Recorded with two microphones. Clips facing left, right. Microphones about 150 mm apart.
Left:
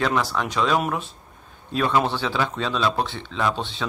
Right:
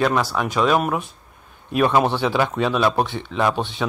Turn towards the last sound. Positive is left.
turn(degrees=-15)  # may be behind; listen again after turning